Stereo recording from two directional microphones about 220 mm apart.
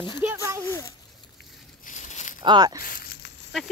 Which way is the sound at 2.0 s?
35° left (ahead or behind).